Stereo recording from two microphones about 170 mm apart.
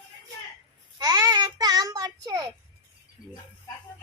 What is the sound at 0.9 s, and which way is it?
Child singing, 20° right (ahead or behind).